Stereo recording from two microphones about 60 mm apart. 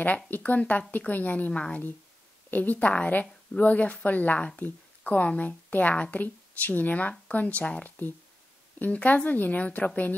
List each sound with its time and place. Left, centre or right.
0.0 s speech: left
2.5 s speech: left